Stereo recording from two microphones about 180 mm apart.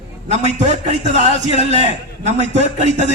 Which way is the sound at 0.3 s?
40° right (ahead or behind).